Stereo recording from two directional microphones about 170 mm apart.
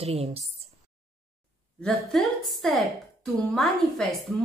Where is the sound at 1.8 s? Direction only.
Centre (ahead or behind).